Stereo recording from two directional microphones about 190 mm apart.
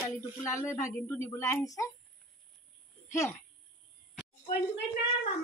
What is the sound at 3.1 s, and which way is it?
Speech, 15° left (ahead or behind).